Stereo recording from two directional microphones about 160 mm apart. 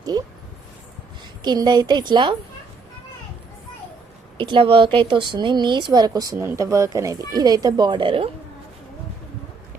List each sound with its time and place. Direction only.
0.0 s a sound: 25° right (ahead or behind)
1.2 s a woman's voice: 25° right (ahead or behind)
4.4 s speech: 30° right (ahead or behind)